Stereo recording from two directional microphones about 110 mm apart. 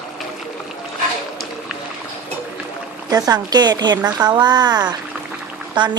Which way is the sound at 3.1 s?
35° right (ahead or behind).